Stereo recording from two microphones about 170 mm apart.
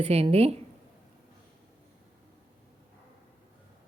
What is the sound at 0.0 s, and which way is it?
Speech, 35° right (ahead or behind).